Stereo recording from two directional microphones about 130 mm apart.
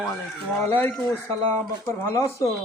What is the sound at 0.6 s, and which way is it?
Speech, 20° left (ahead or behind).